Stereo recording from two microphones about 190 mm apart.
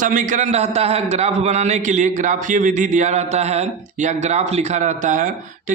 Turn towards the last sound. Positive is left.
turn(degrees=-45)  # may be behind; listen again after turning